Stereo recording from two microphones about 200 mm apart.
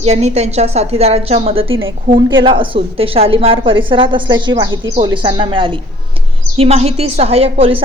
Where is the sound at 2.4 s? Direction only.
25° right (ahead or behind).